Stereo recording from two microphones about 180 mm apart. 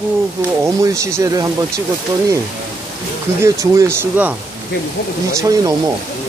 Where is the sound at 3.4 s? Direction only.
15° right (ahead or behind).